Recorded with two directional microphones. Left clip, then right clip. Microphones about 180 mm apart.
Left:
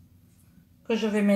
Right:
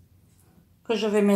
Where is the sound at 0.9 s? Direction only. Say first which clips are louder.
Right 3 dB; 50° right (ahead or behind).